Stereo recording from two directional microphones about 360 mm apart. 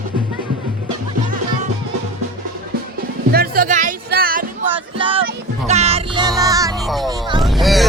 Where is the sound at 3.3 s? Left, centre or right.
Right; by 7.1 s centre.